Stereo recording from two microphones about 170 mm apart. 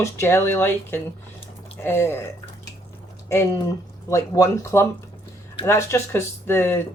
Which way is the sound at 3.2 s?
15° left (ahead or behind).